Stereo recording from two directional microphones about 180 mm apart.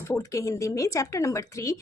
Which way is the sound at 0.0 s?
15° left (ahead or behind).